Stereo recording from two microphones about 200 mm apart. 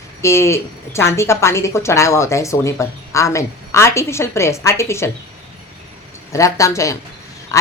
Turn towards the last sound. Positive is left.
turn(degrees=15)  # may be behind; listen again after turning